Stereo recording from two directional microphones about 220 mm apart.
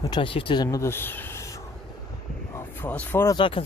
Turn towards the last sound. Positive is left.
turn(degrees=20)  # may be behind; listen again after turning